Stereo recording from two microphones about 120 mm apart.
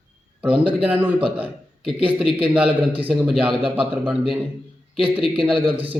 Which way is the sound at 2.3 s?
10° right (ahead or behind).